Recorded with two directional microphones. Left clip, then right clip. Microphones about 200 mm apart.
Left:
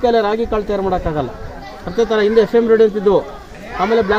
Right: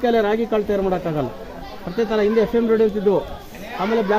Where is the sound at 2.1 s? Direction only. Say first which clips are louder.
Left 5 dB; 10° left (ahead or behind).